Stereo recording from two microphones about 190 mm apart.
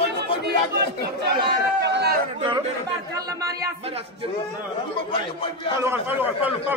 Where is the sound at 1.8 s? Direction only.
65° right (ahead or behind).